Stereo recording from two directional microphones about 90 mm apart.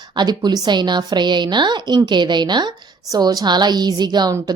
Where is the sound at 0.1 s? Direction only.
55° right (ahead or behind).